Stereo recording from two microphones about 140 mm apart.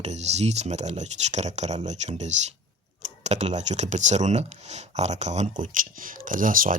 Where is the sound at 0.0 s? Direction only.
50° right (ahead or behind).